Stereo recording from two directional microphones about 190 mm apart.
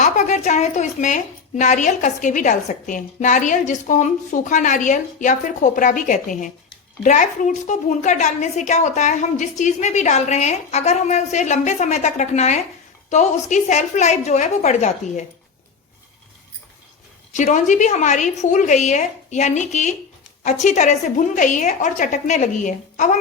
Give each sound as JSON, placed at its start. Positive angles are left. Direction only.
{"t": 0.0, "sound": "a woman's voice", "side_deg": 40}
{"t": 17.3, "sound": "a woman's voice", "side_deg": 40}